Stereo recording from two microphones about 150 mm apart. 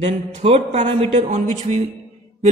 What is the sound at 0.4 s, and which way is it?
A man's voice, 45° right (ahead or behind).